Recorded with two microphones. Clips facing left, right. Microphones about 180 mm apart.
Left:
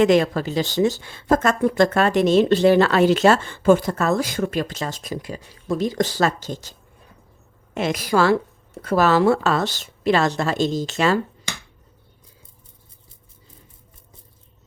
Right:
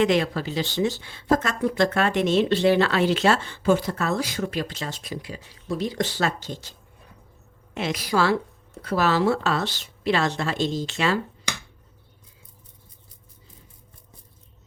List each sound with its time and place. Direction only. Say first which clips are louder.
0.0 s speech: left 5 dB; 45° left (ahead or behind)